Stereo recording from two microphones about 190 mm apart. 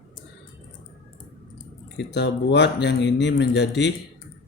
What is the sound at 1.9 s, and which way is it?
Speech, 65° left (ahead or behind).